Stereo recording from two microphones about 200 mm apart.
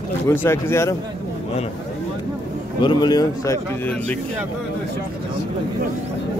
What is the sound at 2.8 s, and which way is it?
A man's voice, 20° left (ahead or behind).